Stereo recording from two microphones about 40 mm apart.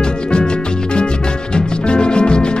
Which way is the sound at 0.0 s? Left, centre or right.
Left.